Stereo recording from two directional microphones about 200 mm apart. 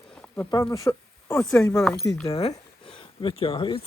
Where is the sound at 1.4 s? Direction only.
5° left (ahead or behind).